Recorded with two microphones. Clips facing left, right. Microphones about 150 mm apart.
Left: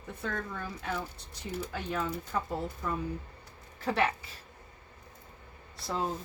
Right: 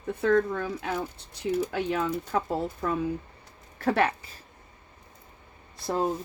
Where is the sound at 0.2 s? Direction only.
70° right (ahead or behind).